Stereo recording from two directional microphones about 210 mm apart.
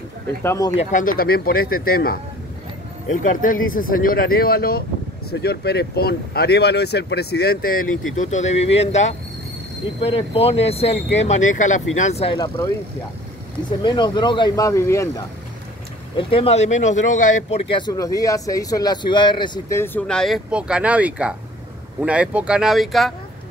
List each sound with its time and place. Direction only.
0.4 s speech: 15° left (ahead or behind)
0.7 s speech: 40° left (ahead or behind)
13.7 s speech: 20° left (ahead or behind)
16.2 s speech: 25° left (ahead or behind); by 23.1 s centre (ahead or behind)